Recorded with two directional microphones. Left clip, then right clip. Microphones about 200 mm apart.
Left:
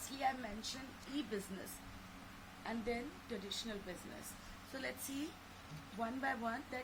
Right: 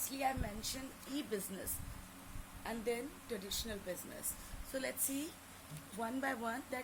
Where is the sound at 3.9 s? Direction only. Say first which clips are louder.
Right 4 dB; 40° right (ahead or behind).